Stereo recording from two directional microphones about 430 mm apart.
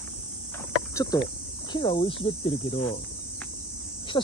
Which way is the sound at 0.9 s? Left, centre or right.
Centre.